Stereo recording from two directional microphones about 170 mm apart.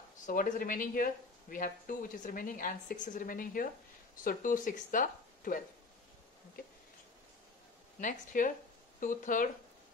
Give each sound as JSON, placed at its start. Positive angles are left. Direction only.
{"t": 0.3, "sound": "speech", "side_deg": 55}
{"t": 6.6, "sound": "a sound", "side_deg": 60}
{"t": 8.0, "sound": "speech", "side_deg": 50}